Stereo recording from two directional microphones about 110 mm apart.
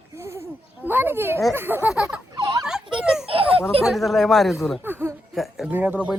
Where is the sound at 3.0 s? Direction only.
5° right (ahead or behind).